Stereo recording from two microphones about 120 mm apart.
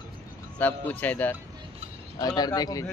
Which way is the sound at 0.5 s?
10° left (ahead or behind).